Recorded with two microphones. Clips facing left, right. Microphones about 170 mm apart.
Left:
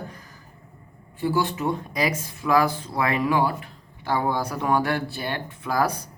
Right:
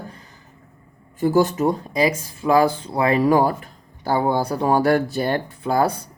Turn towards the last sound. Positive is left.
turn(degrees=-30)  # may be behind; listen again after turning